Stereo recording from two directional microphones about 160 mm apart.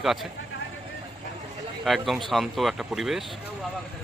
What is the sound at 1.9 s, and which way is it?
Speech, centre (ahead or behind).